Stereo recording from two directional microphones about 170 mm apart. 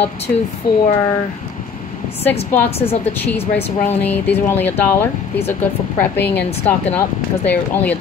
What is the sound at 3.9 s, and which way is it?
Speech, 10° left (ahead or behind).